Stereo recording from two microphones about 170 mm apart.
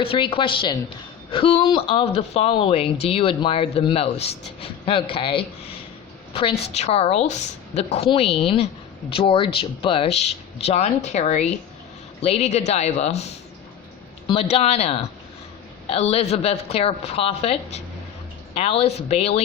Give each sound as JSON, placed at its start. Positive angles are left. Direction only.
{"t": 0.0, "sound": "speech", "side_deg": 35}